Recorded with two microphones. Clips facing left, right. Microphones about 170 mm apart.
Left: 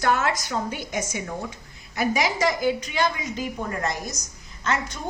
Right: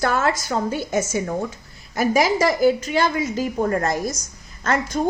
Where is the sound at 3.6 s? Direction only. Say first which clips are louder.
Right 9 dB; 45° right (ahead or behind).